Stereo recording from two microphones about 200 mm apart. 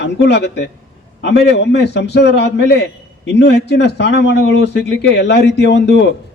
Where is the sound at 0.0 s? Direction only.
60° left (ahead or behind).